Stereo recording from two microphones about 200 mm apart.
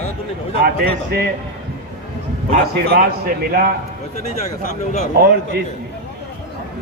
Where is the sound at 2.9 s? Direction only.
50° right (ahead or behind).